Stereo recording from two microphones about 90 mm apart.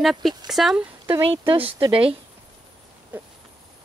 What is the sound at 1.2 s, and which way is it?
Speech, 75° right (ahead or behind).